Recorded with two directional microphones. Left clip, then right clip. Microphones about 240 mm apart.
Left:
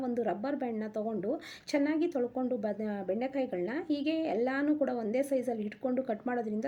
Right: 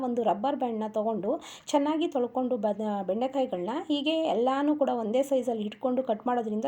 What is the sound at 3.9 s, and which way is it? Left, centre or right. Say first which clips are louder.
Speech: right 5 dB; centre.